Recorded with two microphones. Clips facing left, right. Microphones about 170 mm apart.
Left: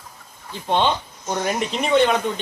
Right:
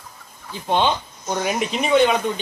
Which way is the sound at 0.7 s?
Centre (ahead or behind).